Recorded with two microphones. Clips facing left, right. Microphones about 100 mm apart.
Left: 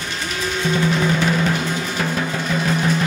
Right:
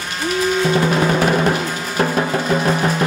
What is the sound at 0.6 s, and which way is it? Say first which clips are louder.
Drum: even; 45° right (ahead or behind).